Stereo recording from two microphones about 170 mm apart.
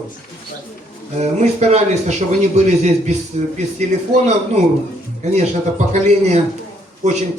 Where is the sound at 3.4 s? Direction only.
40° right (ahead or behind).